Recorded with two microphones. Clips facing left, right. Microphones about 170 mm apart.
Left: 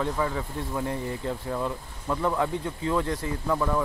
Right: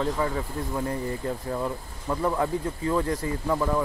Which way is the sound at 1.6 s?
15° right (ahead or behind).